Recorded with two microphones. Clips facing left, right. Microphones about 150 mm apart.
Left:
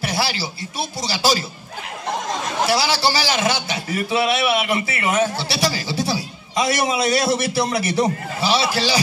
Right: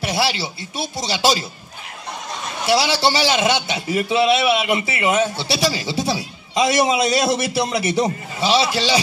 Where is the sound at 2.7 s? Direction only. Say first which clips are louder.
Right 4 dB; 25° right (ahead or behind).